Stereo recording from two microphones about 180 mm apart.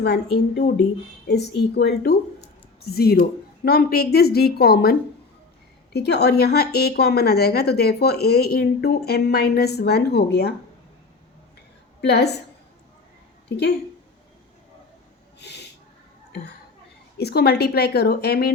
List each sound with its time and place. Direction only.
0.0 s a woman's voice: 70° left (ahead or behind)
12.0 s a woman's voice: 65° left (ahead or behind)
15.4 s a sound: 70° left (ahead or behind)
17.2 s a woman's voice: 65° left (ahead or behind)